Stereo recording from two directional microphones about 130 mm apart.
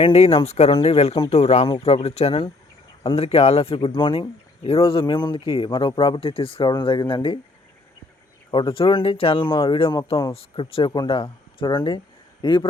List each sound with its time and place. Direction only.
0.0 s speech: 50° left (ahead or behind)
8.4 s speech: 40° left (ahead or behind)